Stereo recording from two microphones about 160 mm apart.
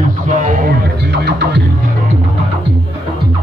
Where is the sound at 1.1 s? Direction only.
90° right.